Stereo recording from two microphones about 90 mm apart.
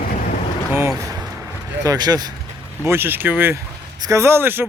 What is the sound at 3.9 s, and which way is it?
Speech, 45° right (ahead or behind).